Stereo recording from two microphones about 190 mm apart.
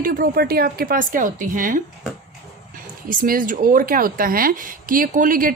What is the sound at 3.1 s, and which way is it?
Speech, 45° right (ahead or behind).